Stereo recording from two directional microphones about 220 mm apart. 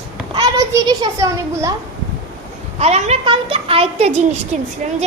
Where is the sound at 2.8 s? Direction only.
30° right (ahead or behind).